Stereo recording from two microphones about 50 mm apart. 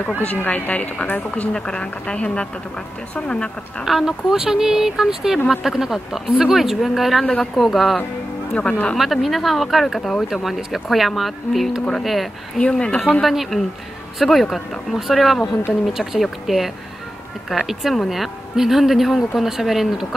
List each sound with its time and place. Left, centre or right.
0.5 s a woman's voice: left
1.5 s speech: centre
3.8 s a woman's voice: centre
8.5 s speech: left
8.9 s a woman's voice: centre
12.5 s speech: left
13.2 s a woman's voice: centre